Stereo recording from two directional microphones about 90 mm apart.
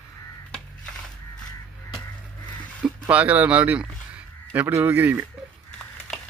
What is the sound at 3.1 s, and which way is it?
Speech, 15° right (ahead or behind).